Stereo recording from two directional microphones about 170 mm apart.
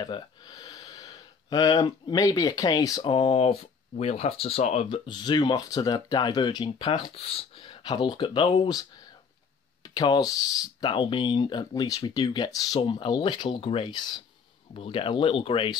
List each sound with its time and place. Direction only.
0.0 s a sound: 25° left (ahead or behind)
1.9 s speech: 25° left (ahead or behind)
9.8 s speech: 25° left (ahead or behind)